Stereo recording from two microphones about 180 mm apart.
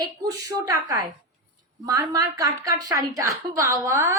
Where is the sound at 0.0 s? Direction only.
20° right (ahead or behind).